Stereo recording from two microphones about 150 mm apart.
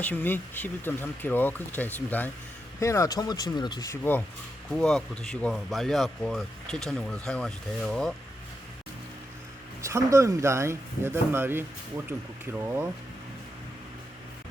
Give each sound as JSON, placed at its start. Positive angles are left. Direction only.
{"t": 0.0, "sound": "speech", "side_deg": 10}
{"t": 4.7, "sound": "speech", "side_deg": 5}
{"t": 9.8, "sound": "speech", "side_deg": -20}